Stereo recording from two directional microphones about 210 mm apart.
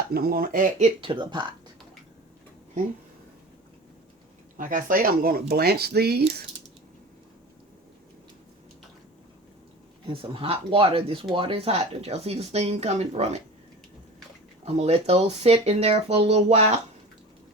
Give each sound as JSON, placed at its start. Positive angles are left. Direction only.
{"t": 0.1, "sound": "speech", "side_deg": -45}
{"t": 1.0, "sound": "speech", "side_deg": -20}
{"t": 4.5, "sound": "speech", "side_deg": -40}
{"t": 10.1, "sound": "speech", "side_deg": -25}
{"t": 14.6, "sound": "speech", "side_deg": -30}